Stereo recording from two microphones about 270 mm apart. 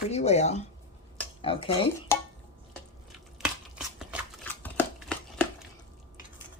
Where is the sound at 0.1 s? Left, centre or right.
Left.